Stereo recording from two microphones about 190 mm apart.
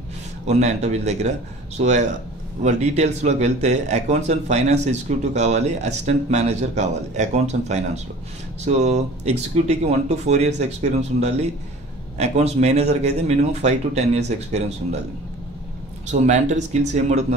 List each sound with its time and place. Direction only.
0.5 s speech: 35° right (ahead or behind)
16.1 s speech: 40° right (ahead or behind)